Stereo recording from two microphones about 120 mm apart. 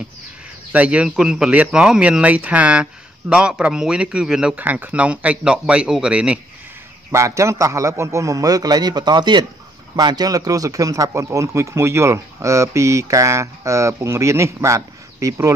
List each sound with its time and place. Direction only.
0.7 s speech: 10° right (ahead or behind)
7.1 s speech: 25° right (ahead or behind)